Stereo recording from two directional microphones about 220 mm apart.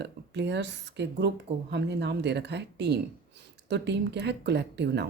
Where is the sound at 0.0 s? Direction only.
50° right (ahead or behind).